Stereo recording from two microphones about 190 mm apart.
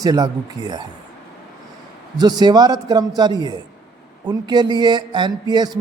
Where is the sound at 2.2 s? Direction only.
20° right (ahead or behind).